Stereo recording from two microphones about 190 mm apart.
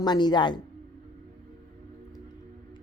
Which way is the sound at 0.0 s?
20° left (ahead or behind).